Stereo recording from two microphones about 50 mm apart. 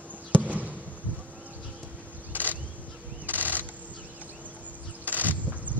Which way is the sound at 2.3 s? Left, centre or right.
Right.